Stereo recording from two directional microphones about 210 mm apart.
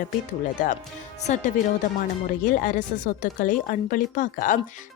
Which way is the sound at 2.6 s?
40° left (ahead or behind).